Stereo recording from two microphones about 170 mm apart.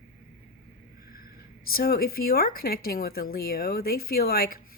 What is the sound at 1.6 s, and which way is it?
Speech, 60° left (ahead or behind).